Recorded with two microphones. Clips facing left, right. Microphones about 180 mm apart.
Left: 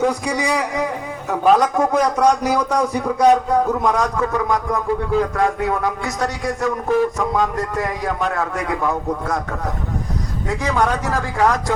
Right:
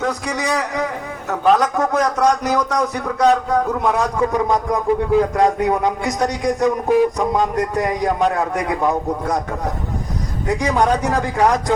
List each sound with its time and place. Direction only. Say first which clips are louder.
0.0 s a man's voice: left 3 dB; 10° left (ahead or behind)
3.8 s a man's voice: right 1 dB; 10° right (ahead or behind)
10.6 s a man's voice: right 2 dB; 15° right (ahead or behind)